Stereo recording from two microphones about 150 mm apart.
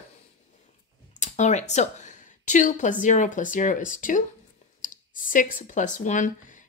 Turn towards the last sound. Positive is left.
turn(degrees=60)  # may be behind; listen again after turning